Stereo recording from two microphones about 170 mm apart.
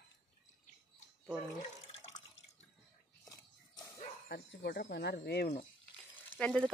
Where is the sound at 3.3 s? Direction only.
20° left (ahead or behind).